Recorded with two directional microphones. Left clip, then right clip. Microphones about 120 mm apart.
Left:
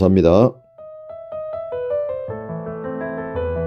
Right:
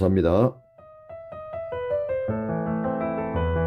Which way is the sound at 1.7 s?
35° left (ahead or behind).